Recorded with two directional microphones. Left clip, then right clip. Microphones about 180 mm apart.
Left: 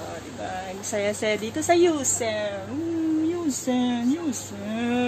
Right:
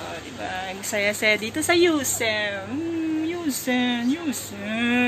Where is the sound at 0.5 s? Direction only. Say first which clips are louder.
Right 2 dB; 15° left (ahead or behind).